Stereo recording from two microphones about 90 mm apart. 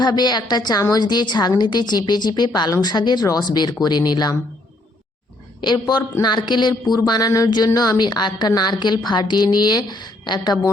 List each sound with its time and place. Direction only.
0.0 s speech: 50° left (ahead or behind)
5.5 s a woman's voice: 55° left (ahead or behind)